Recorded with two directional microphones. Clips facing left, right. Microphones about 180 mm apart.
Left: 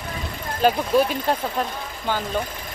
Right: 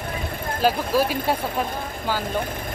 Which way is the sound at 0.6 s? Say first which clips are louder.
Left 2 dB; 5° right (ahead or behind).